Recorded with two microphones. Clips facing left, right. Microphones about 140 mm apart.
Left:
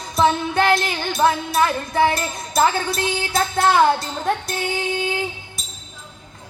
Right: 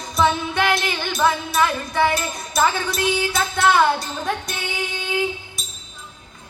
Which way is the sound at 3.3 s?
35° left (ahead or behind).